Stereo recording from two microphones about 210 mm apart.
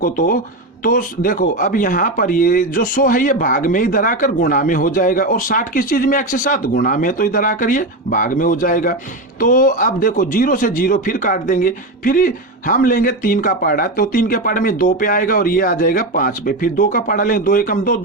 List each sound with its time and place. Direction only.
0.0 s speech: 40° left (ahead or behind)